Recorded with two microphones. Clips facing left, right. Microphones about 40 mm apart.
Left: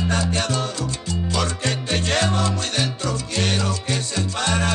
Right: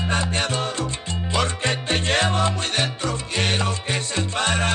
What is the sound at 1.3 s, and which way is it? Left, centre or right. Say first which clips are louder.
Music: right 3 dB; right.